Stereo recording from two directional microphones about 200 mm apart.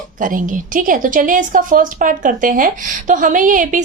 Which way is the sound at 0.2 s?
40° right (ahead or behind).